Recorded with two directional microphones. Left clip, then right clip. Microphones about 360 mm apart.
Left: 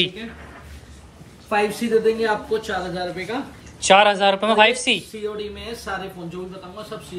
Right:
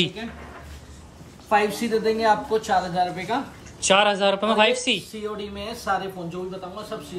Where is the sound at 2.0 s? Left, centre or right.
Centre.